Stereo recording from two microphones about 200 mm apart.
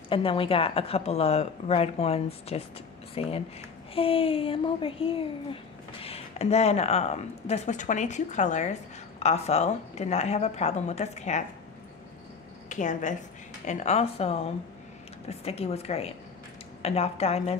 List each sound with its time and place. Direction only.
0.1 s speech: 25° left (ahead or behind)
12.6 s a woman's voice: 40° left (ahead or behind)